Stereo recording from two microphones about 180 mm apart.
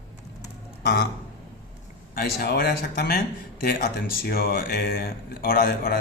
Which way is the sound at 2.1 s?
60° left (ahead or behind).